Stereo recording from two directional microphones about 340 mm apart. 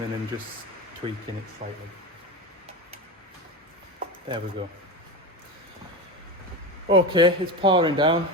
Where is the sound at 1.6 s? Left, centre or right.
Right.